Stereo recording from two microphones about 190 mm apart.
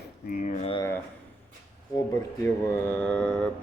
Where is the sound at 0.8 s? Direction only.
15° left (ahead or behind).